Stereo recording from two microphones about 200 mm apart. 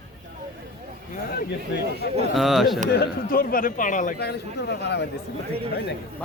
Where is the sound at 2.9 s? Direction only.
50° left (ahead or behind).